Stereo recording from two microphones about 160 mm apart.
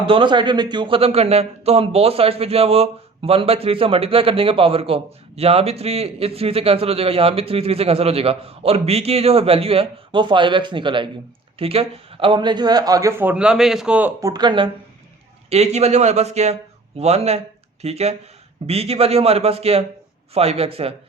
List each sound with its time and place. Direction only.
0.0 s a man's voice: 30° right (ahead or behind); by 14.1 s 5° right (ahead or behind)
14.2 s a man's voice: 25° right (ahead or behind)
15.4 s a man's voice: 40° right (ahead or behind)